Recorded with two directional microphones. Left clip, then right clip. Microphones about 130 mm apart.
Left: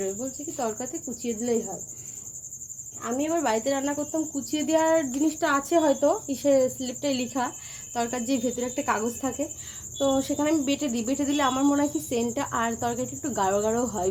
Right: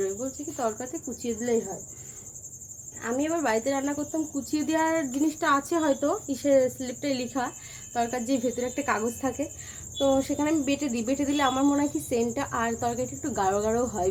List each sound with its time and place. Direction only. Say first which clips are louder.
0.0 s speech: right 1 dB; 15° left (ahead or behind)
3.0 s speech: left 1 dB; 15° left (ahead or behind)